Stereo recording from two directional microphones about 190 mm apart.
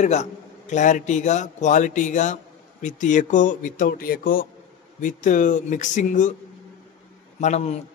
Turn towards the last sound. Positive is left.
turn(degrees=35)  # may be behind; listen again after turning